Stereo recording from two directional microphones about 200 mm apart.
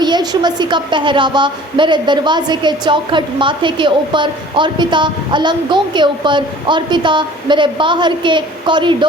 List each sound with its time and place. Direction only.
0.0 s a woman's voice: 20° right (ahead or behind)